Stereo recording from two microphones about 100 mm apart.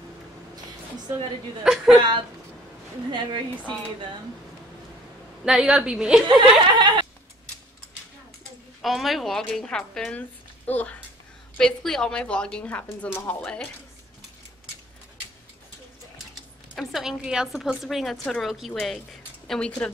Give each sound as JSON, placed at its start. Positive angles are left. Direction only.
{"t": 1.6, "sound": "a woman's voice", "side_deg": -5}
{"t": 2.0, "sound": "speech", "side_deg": -50}
{"t": 5.4, "sound": "a woman's voice", "side_deg": -5}
{"t": 6.2, "sound": "speech", "side_deg": -55}
{"t": 6.7, "sound": "a sound", "side_deg": -50}
{"t": 8.8, "sound": "a woman's voice", "side_deg": 0}
{"t": 16.7, "sound": "a woman's voice", "side_deg": 0}